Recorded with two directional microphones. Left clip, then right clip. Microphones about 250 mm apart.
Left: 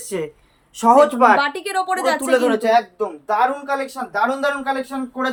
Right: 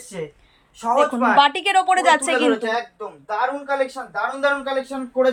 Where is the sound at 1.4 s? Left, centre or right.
Centre.